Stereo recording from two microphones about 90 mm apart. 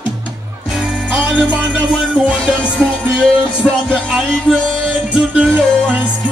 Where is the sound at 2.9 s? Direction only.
15° left (ahead or behind).